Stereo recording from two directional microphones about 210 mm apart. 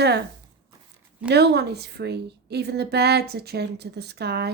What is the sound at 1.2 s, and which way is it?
A woman's voice, 50° right (ahead or behind).